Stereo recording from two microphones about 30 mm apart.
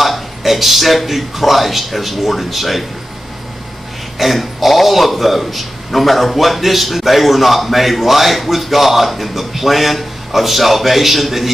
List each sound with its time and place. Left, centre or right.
0.0 s a man's voice: centre
4.2 s a man's voice: centre